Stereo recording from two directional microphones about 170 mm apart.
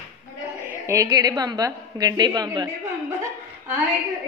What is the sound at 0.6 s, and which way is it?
A woman's voice, 15° right (ahead or behind).